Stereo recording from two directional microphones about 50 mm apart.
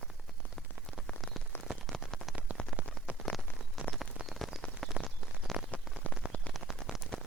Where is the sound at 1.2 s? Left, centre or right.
Centre.